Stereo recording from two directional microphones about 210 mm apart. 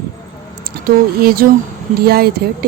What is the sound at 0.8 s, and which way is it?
Speech, 45° right (ahead or behind).